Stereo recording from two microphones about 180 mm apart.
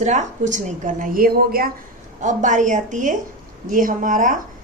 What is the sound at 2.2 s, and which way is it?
A woman's voice, 45° right (ahead or behind).